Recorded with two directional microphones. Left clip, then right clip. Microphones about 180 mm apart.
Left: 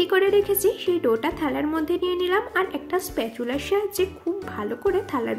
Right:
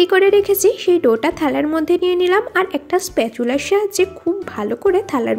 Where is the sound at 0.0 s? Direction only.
35° right (ahead or behind).